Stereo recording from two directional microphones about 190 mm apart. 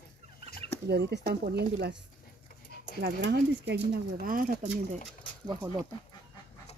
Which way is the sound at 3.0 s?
60° right (ahead or behind).